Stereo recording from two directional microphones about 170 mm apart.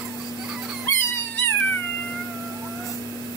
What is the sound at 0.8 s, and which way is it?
Dog, 15° left (ahead or behind).